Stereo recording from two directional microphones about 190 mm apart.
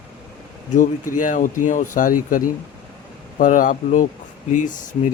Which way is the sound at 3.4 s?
45° left (ahead or behind).